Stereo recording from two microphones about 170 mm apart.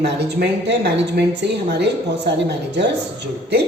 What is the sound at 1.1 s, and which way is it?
A man's voice, 80° right.